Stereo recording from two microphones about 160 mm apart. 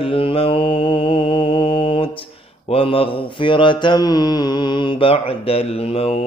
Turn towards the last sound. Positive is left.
turn(degrees=40)  # may be behind; listen again after turning